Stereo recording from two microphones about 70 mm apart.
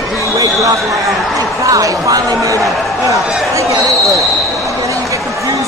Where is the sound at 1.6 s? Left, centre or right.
Right.